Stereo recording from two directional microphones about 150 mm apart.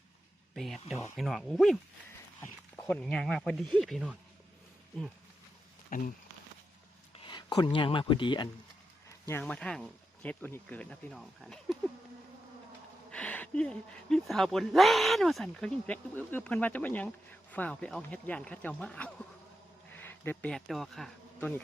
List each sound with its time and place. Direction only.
0.5 s speech: centre (ahead or behind)
2.9 s speech: 5° left (ahead or behind)
5.9 s a sound: 60° left (ahead or behind)
7.2 s speech: 30° left (ahead or behind)
9.0 s a sound: 20° left (ahead or behind)
9.4 s speech: 5° left (ahead or behind)
13.1 s speech: 10° left (ahead or behind)
19.9 s insect: 15° left (ahead or behind)